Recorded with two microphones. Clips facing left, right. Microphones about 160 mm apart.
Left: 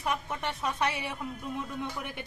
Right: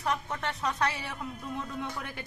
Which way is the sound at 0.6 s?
10° left (ahead or behind).